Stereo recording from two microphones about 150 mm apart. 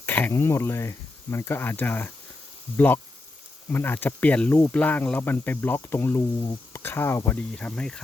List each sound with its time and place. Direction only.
0.0 s speech: 15° left (ahead or behind)